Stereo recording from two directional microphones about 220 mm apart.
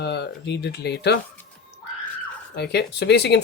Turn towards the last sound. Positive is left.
turn(degrees=50)  # may be behind; listen again after turning